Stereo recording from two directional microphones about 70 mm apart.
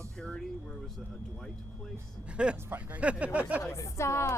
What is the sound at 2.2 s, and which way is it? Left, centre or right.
Speech, centre.